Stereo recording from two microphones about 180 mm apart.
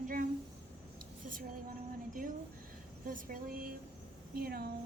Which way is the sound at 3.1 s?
50° right (ahead or behind).